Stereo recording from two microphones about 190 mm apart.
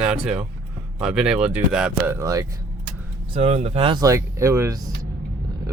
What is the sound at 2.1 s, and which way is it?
Speech, 20° right (ahead or behind).